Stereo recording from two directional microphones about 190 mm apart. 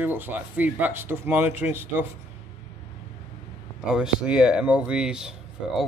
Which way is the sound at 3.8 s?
5° right (ahead or behind).